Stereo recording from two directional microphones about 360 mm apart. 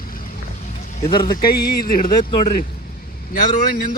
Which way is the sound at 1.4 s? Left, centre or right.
Left.